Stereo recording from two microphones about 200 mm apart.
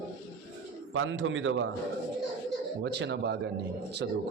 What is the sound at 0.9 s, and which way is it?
Speech, 70° right (ahead or behind).